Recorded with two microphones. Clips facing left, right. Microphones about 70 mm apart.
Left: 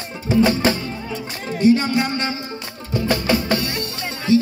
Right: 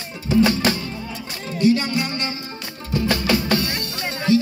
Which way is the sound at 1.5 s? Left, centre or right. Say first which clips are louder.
Left 3 dB; left.